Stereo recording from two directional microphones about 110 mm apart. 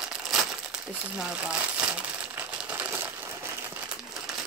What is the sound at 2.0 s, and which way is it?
Coin, 10° right (ahead or behind).